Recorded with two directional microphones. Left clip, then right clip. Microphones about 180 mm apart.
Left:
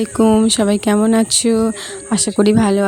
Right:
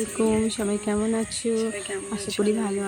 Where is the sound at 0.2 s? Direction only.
60° left (ahead or behind).